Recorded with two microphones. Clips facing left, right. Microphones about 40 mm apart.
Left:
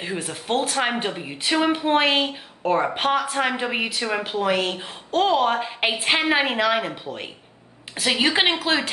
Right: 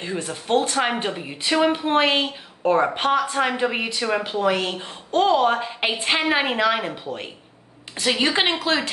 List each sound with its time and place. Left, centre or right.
0.0 s a woman's voice: centre